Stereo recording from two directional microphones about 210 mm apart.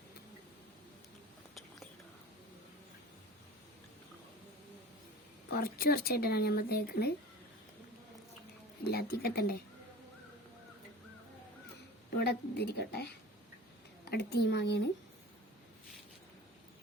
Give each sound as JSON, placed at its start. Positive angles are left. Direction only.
{"t": 5.5, "sound": "speech", "side_deg": 45}
{"t": 8.8, "sound": "speech", "side_deg": 50}
{"t": 12.1, "sound": "speech", "side_deg": 50}